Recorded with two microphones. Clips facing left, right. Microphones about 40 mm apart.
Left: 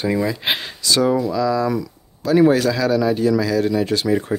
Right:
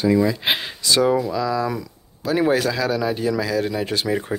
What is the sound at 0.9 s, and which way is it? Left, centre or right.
Speech, centre.